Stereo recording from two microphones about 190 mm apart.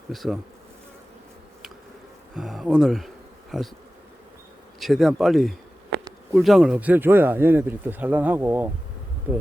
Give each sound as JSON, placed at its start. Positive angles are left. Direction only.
{"t": 0.1, "sound": "speech", "side_deg": 0}
{"t": 2.3, "sound": "speech", "side_deg": 0}
{"t": 4.8, "sound": "speech", "side_deg": 0}